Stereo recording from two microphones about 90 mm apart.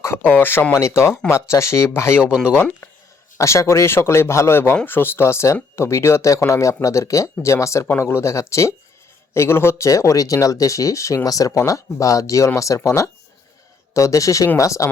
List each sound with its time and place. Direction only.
0.0 s speech: 25° left (ahead or behind)
3.3 s speech: 35° left (ahead or behind)